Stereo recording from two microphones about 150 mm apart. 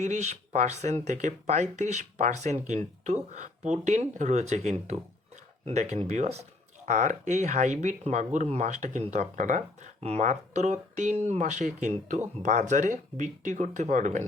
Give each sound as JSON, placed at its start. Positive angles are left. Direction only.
{"t": 0.0, "sound": "speech", "side_deg": -50}